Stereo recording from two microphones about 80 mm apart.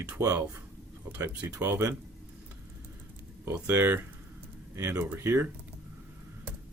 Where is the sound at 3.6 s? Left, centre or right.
Right.